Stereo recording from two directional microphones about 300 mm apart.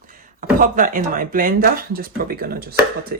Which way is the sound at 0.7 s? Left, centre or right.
Right.